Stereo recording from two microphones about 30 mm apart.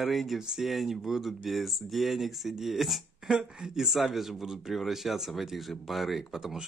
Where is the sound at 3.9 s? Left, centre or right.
Centre.